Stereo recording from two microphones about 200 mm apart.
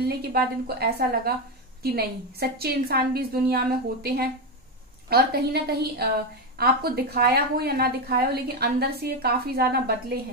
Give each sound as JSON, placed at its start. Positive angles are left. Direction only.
{"t": 0.0, "sound": "a woman's voice", "side_deg": -50}